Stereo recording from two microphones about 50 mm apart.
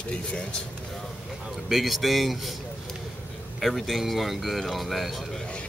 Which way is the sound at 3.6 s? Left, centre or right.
Centre.